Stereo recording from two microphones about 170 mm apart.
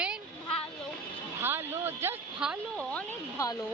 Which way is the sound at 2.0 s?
15° right (ahead or behind).